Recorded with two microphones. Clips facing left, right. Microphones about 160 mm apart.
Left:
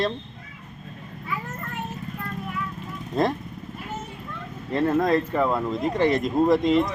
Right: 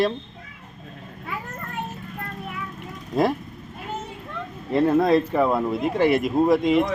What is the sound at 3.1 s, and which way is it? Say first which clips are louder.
Speech: right 2 dB; 5° right (ahead or behind).